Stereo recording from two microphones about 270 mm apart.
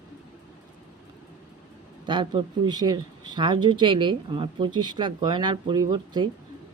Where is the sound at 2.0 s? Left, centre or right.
Centre.